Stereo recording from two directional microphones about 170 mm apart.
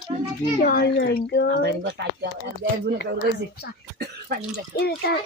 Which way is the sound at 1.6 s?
75° right (ahead or behind).